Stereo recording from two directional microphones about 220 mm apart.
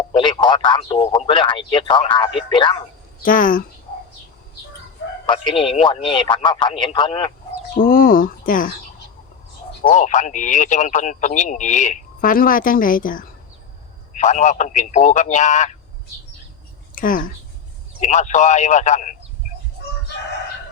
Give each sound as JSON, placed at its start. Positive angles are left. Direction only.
{"t": 0.1, "sound": "radio", "side_deg": 20}
{"t": 1.2, "sound": "speech", "side_deg": 20}
{"t": 3.2, "sound": "speech", "side_deg": 40}
{"t": 5.6, "sound": "speech", "side_deg": 25}
{"t": 7.8, "sound": "speech", "side_deg": 40}
{"t": 9.9, "sound": "speech", "side_deg": 35}
{"t": 16.9, "sound": "speech", "side_deg": 40}